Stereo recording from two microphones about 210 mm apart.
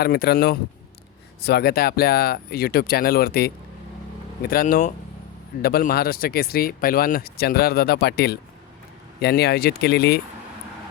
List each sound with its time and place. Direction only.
0.0 s speech: 50° left (ahead or behind)